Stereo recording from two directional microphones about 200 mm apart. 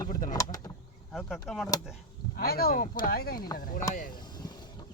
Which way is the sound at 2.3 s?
50° left (ahead or behind).